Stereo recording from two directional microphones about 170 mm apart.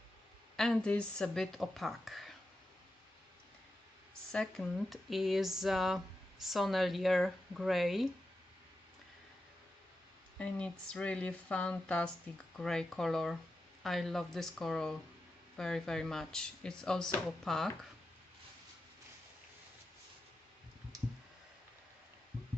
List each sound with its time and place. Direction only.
0.6 s speech: 5° left (ahead or behind)
4.3 s speech: 5° left (ahead or behind)
10.4 s speech: 5° left (ahead or behind)